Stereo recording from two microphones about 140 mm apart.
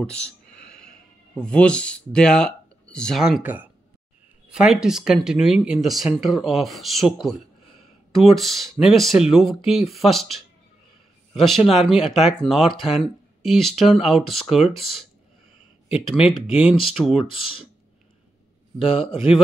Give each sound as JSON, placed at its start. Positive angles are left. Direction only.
{"t": 0.0, "sound": "speech", "side_deg": 5}
{"t": 4.5, "sound": "speech", "side_deg": -5}
{"t": 11.3, "sound": "speech", "side_deg": 0}
{"t": 16.2, "sound": "speech", "side_deg": 35}
{"t": 16.4, "sound": "speech", "side_deg": -5}
{"t": 17.2, "sound": "speech", "side_deg": 40}
{"t": 18.8, "sound": "speech", "side_deg": 40}